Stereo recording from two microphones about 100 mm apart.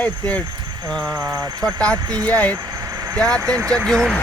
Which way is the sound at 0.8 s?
45° right (ahead or behind).